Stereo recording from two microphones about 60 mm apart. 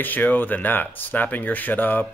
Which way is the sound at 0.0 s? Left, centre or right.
Left.